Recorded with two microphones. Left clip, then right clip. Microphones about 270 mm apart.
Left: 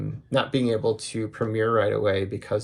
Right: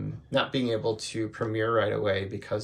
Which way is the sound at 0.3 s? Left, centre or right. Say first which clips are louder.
Left 3 dB; centre.